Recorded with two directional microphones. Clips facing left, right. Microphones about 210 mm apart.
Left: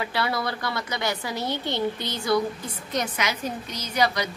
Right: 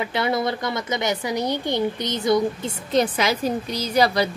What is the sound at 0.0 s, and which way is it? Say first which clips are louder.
A woman's voice: right 4 dB; 20° right (ahead or behind).